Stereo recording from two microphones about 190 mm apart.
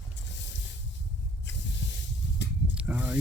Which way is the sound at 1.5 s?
70° left (ahead or behind).